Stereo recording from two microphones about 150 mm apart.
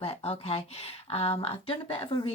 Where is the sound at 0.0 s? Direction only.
40° left (ahead or behind).